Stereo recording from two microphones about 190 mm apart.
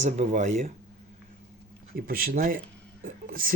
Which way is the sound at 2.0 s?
50° right (ahead or behind).